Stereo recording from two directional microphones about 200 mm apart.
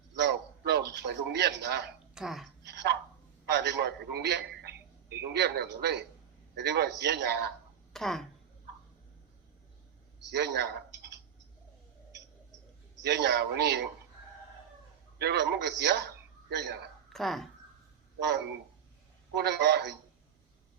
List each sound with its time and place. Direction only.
0.2 s a sound: 55° right (ahead or behind)
2.1 s speech: centre (ahead or behind)
2.6 s a sound: 60° right (ahead or behind)
3.5 s a man's voice: 55° right (ahead or behind)
7.9 s speech: centre (ahead or behind)
10.2 s speech: 60° right (ahead or behind)
13.0 s a man's voice: 55° right (ahead or behind)
15.2 s a man's voice: 55° right (ahead or behind)
17.1 s speech: centre (ahead or behind)
19.3 s a man's voice: 60° right (ahead or behind)